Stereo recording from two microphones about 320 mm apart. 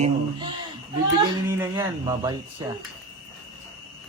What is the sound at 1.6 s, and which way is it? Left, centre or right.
Speech, centre.